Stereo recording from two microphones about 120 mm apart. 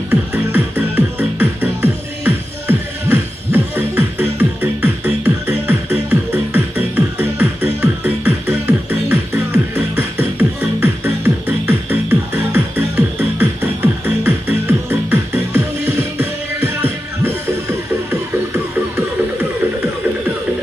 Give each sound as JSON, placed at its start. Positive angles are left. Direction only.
{"t": 0.1, "sound": "music", "side_deg": -15}